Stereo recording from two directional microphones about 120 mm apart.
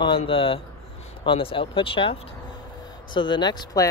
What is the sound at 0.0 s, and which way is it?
Speech, 50° left (ahead or behind).